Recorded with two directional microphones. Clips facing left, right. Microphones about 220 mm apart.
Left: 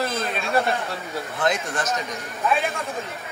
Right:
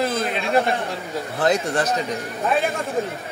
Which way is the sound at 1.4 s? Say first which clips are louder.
Right 5 dB; 35° right (ahead or behind).